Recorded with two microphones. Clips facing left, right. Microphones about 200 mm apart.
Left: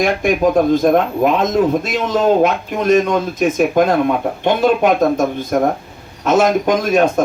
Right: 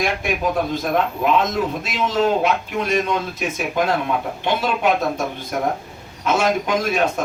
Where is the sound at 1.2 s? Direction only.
45° left (ahead or behind).